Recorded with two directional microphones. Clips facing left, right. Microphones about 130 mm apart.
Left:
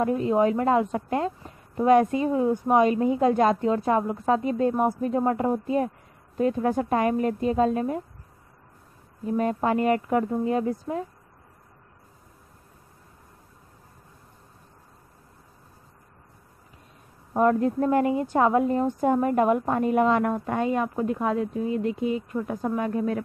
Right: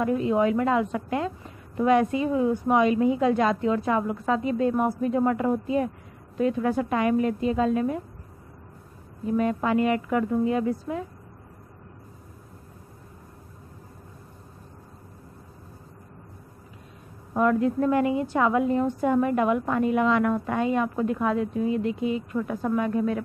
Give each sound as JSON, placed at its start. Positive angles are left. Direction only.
{"t": 0.0, "sound": "a woman's voice", "side_deg": 35}
{"t": 9.4, "sound": "a woman's voice", "side_deg": 40}
{"t": 17.4, "sound": "a woman's voice", "side_deg": 35}